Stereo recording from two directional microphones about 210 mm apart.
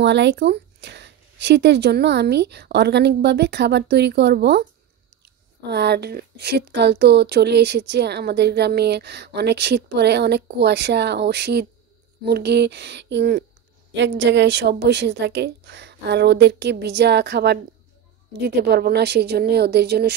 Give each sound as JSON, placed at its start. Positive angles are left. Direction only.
{"t": 0.0, "sound": "speech", "side_deg": -55}